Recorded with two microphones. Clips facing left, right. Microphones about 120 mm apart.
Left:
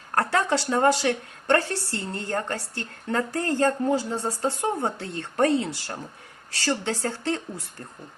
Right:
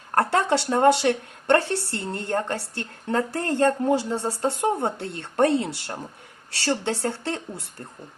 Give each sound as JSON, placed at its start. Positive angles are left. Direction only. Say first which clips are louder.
{"t": 0.2, "sound": "speech", "louder": "right 2 dB", "side_deg": -65}